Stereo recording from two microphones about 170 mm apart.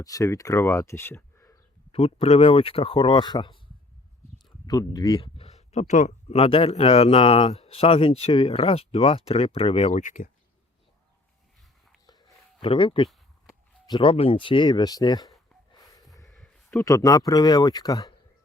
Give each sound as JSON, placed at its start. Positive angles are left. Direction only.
{"t": 0.0, "sound": "speech", "side_deg": 20}
{"t": 1.9, "sound": "speech", "side_deg": 35}
{"t": 4.6, "sound": "speech", "side_deg": 20}
{"t": 12.0, "sound": "a sound", "side_deg": 25}
{"t": 13.8, "sound": "speech", "side_deg": 30}
{"t": 15.7, "sound": "snort", "side_deg": 20}
{"t": 16.7, "sound": "speech", "side_deg": 20}